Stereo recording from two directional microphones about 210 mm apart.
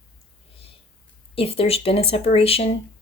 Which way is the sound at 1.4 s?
25° left (ahead or behind).